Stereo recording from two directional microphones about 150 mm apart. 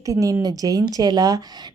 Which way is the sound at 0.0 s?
20° right (ahead or behind).